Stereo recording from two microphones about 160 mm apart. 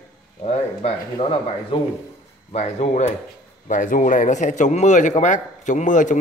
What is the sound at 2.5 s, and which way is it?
Speech, 45° left (ahead or behind).